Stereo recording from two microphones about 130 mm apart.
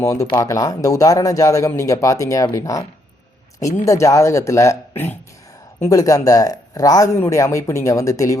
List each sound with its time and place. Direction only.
0.0 s speech: 25° left (ahead or behind)
3.8 s speech: 25° left (ahead or behind)